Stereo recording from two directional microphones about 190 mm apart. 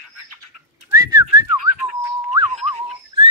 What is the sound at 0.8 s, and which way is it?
Whistling, 15° right (ahead or behind).